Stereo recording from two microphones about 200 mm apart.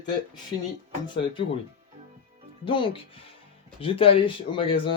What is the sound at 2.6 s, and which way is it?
Speech, 25° left (ahead or behind).